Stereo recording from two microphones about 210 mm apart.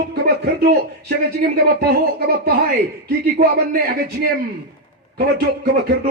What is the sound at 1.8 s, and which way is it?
Speech, 50° right (ahead or behind).